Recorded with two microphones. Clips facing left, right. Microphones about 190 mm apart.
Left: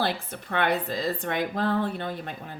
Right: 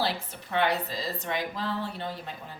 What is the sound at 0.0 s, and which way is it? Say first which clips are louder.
A woman's voice: left 2 dB; 55° left (ahead or behind).